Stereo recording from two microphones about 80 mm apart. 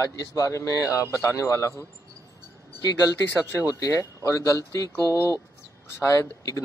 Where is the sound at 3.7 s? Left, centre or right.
Left.